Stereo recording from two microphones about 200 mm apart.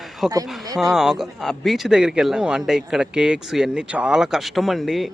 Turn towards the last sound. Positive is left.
turn(degrees=0)  # may be behind; listen again after turning